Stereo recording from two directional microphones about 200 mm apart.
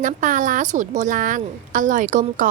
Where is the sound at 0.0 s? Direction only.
40° right (ahead or behind).